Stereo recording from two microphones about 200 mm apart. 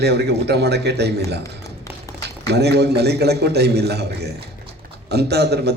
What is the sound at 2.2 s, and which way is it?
A man's voice, 55° right (ahead or behind).